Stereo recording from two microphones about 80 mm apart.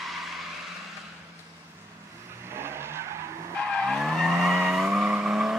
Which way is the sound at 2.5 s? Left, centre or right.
Right.